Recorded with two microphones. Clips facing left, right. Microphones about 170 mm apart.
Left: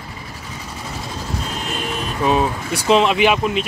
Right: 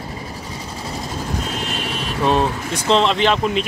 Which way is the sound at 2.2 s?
5° left (ahead or behind).